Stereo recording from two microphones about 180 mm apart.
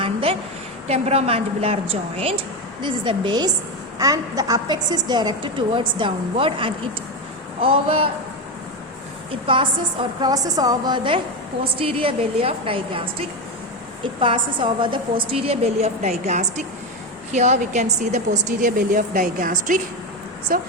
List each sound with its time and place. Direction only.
0.0 s a sound: 30° right (ahead or behind)
0.9 s a woman's voice: 35° right (ahead or behind)
9.5 s a woman's voice: 30° right (ahead or behind); by 20.7 s 55° right (ahead or behind)